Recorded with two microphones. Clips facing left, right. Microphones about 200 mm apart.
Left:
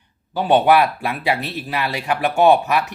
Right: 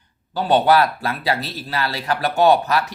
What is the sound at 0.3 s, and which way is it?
Speech, 10° left (ahead or behind).